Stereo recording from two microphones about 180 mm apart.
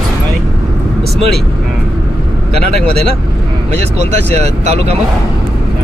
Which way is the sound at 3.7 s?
35° right (ahead or behind).